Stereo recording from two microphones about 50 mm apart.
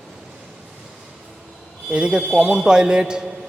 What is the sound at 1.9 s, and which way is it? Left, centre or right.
A man's voice, centre.